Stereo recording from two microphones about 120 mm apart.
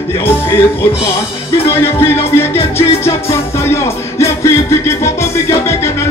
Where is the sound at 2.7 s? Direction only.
20° left (ahead or behind).